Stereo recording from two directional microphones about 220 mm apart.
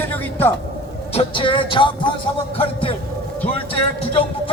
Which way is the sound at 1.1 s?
25° left (ahead or behind).